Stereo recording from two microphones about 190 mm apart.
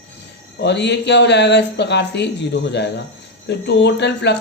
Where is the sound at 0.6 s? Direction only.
65° left (ahead or behind).